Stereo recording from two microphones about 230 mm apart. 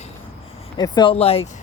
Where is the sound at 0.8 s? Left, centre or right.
Left.